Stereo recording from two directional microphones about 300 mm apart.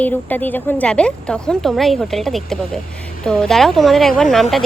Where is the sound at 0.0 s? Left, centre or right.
Centre.